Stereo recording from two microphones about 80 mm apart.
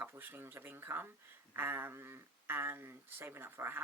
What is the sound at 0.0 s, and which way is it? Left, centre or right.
Speech, right.